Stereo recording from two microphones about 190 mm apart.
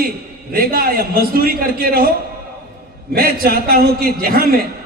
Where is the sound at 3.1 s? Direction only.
50° right (ahead or behind).